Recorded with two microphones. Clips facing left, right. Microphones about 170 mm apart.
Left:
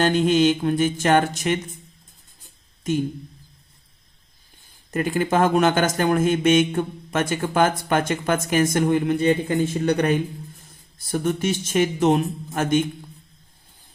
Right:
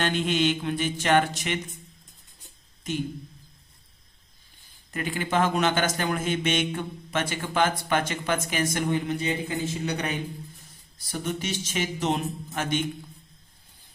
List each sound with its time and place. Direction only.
0.0 s speech: 40° left (ahead or behind)
4.9 s speech: 45° left (ahead or behind)